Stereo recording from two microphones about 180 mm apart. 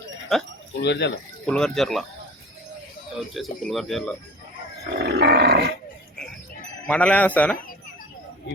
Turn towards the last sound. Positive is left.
turn(degrees=10)  # may be behind; listen again after turning